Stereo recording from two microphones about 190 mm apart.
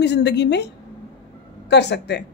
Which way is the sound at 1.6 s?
65° left (ahead or behind).